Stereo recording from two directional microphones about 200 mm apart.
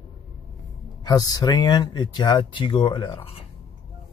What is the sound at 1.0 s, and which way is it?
Speech, 20° left (ahead or behind).